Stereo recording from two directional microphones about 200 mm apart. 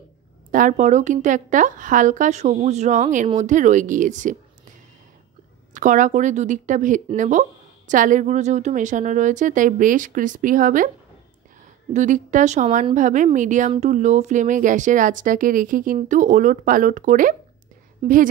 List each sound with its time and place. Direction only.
0.5 s speech: 40° right (ahead or behind)
5.8 s speech: 40° right (ahead or behind)
11.9 s speech: 35° right (ahead or behind)